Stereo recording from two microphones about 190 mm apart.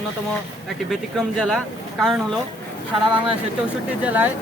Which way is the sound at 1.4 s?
Centre (ahead or behind).